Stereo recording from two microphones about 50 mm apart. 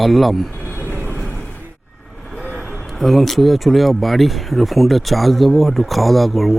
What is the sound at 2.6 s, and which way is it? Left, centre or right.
Speech, centre.